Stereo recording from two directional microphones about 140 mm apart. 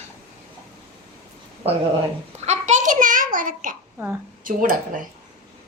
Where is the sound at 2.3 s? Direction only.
50° right (ahead or behind); by 3.7 s 75° right (ahead or behind).